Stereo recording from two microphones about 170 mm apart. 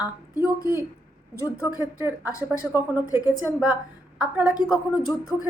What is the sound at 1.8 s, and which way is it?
A woman's voice, 10° right (ahead or behind).